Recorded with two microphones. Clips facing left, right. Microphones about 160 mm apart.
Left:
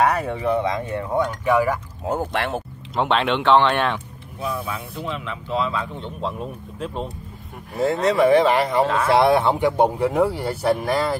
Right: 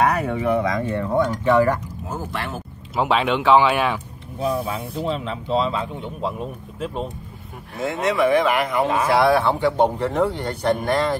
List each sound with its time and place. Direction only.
0.0 s speech: 30° left (ahead or behind); by 1.8 s 10° left (ahead or behind)
2.0 s speech: 65° left (ahead or behind)
3.0 s speech: 5° right (ahead or behind)
4.5 s speech: 55° right (ahead or behind)
4.9 s speech: 35° right (ahead or behind)
5.9 s speech: 5° right (ahead or behind)
7.8 s speech: 35° left (ahead or behind)
8.8 s speech: 10° right (ahead or behind)
9.1 s speech: 20° left (ahead or behind); by 11.1 s 5° left (ahead or behind)